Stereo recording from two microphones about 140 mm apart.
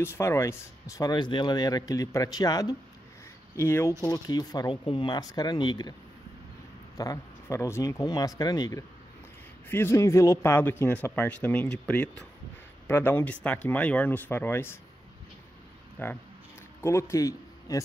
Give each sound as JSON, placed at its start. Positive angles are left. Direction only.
{"t": 0.0, "sound": "speech", "side_deg": 15}
{"t": 7.0, "sound": "speech", "side_deg": 25}
{"t": 9.7, "sound": "speech", "side_deg": 20}
{"t": 16.0, "sound": "speech", "side_deg": 15}